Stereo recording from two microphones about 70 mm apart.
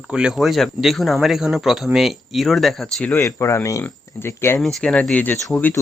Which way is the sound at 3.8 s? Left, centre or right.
Left.